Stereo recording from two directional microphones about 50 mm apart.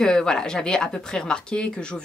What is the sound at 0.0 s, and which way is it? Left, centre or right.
Speech, centre.